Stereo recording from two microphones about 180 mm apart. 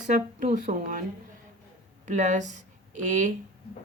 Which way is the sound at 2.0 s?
40° right (ahead or behind).